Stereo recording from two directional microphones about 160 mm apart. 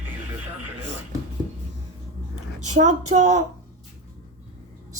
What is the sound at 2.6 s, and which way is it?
Speech, 50° right (ahead or behind).